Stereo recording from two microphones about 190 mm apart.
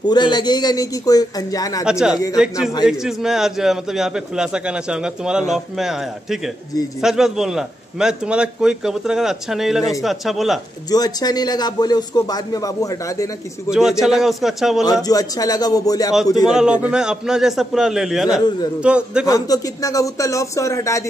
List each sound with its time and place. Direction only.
0.0 s speech: 20° left (ahead or behind)
1.9 s a man's voice: 5° right (ahead or behind)
10.9 s speech: 20° left (ahead or behind)
13.7 s a man's voice: centre (ahead or behind)
14.9 s speech: 20° left (ahead or behind)
16.4 s a man's voice: 5° right (ahead or behind)
19.2 s speech: 20° left (ahead or behind)